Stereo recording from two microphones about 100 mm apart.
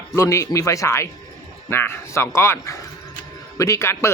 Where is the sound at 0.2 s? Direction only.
30° left (ahead or behind).